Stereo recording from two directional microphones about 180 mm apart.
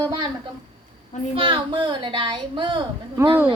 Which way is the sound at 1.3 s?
25° right (ahead or behind).